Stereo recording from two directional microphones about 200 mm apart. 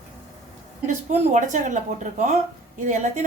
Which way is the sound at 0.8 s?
35° right (ahead or behind).